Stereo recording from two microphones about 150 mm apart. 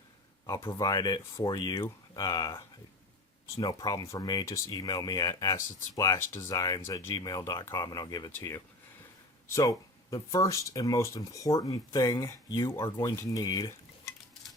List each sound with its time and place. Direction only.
0.6 s speech: 25° left (ahead or behind)